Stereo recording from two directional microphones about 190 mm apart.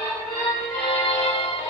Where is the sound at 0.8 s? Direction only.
25° left (ahead or behind).